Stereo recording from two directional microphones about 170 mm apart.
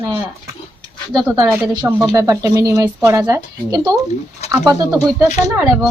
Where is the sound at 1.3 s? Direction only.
15° right (ahead or behind).